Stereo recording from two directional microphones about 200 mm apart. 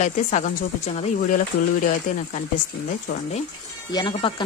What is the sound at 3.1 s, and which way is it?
Speech, 45° left (ahead or behind).